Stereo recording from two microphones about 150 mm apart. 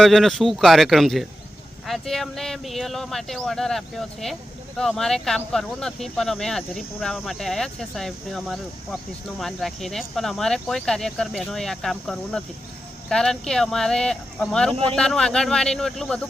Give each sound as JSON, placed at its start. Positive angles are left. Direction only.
{"t": 0.0, "sound": "speech", "side_deg": 0}